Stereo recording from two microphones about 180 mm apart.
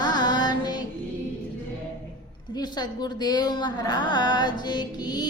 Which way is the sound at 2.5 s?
25° left (ahead or behind).